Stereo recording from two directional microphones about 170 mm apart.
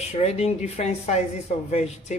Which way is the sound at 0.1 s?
40° left (ahead or behind).